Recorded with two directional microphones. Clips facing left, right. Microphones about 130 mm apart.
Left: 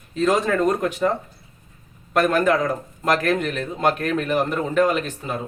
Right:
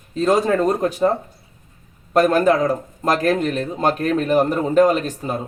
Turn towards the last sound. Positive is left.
turn(degrees=-40)  # may be behind; listen again after turning